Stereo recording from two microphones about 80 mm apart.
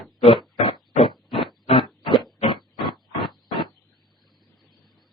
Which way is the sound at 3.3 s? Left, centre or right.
Left.